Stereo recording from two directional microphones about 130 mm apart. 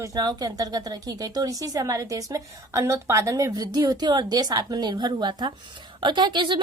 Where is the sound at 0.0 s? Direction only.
30° right (ahead or behind).